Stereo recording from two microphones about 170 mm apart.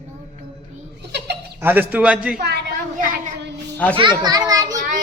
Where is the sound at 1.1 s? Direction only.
75° right (ahead or behind).